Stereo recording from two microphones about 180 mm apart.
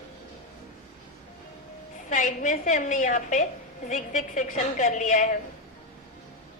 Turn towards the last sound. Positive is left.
turn(degrees=45)  # may be behind; listen again after turning